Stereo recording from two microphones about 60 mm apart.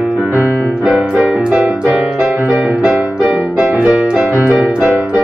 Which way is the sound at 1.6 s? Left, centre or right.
Centre.